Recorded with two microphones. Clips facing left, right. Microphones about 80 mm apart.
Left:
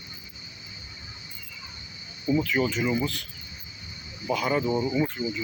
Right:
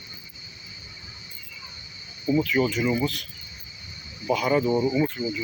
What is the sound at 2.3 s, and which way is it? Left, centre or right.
Speech, left.